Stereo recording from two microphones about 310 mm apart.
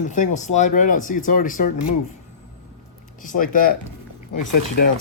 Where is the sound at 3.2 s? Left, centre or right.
Left.